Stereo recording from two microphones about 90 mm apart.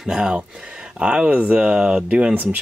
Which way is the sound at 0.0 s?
5° right (ahead or behind).